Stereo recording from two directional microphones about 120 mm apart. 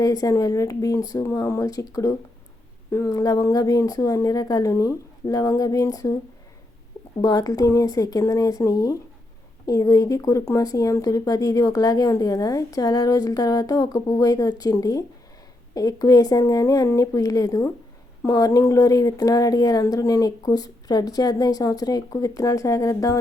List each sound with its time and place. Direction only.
0.0 s speech: 30° left (ahead or behind)
7.2 s speech: 35° left (ahead or behind)